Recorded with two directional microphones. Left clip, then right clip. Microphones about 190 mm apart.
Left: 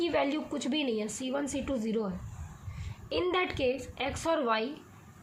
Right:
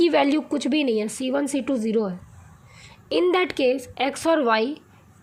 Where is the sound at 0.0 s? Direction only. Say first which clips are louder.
Right 10 dB; 50° right (ahead or behind).